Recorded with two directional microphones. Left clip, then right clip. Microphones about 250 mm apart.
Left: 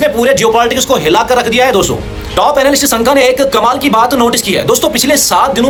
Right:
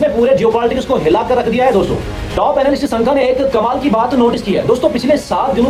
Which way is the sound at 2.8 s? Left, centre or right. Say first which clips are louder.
Left 4 dB; left.